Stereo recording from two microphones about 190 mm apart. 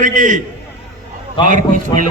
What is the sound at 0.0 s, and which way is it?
Speech, 40° right (ahead or behind).